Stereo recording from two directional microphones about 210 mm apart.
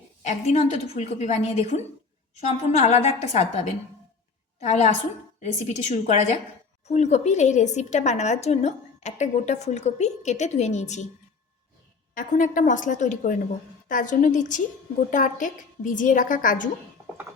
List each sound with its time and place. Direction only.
0.2 s a woman's voice: 30° left (ahead or behind)
12.1 s a woman's voice: 40° left (ahead or behind)